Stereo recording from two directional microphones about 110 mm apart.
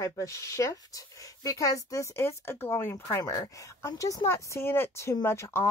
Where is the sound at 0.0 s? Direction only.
30° left (ahead or behind).